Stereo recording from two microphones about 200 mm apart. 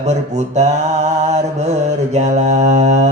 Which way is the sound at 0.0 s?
35° right (ahead or behind).